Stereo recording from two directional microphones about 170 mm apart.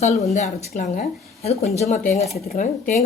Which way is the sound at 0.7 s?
50° left (ahead or behind).